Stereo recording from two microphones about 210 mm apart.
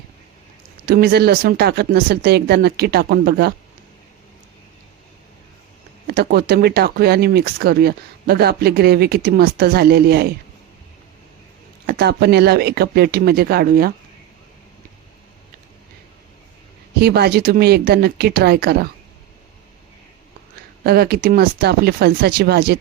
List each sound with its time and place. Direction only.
0.9 s speech: 45° right (ahead or behind)
6.1 s speech: 50° right (ahead or behind)
11.9 s speech: 50° right (ahead or behind)
17.0 s speech: 50° right (ahead or behind)
20.8 s speech: 50° right (ahead or behind)